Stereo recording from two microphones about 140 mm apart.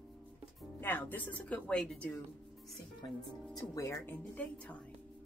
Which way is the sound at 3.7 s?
20° left (ahead or behind).